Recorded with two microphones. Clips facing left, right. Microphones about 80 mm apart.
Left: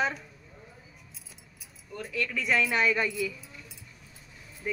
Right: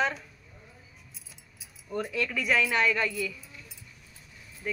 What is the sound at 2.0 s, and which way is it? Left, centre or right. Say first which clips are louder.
Speech: right 2 dB; centre.